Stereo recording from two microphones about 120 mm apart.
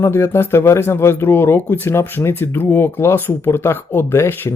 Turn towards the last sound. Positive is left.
turn(degrees=20)  # may be behind; listen again after turning